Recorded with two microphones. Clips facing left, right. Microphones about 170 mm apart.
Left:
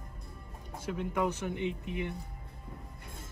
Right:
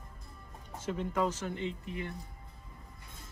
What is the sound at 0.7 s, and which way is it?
Speech, 10° left (ahead or behind).